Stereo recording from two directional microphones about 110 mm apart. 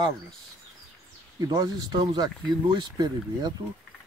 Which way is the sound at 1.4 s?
40° right (ahead or behind).